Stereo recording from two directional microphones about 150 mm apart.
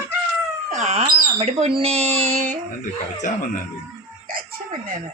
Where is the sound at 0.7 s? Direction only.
50° right (ahead or behind).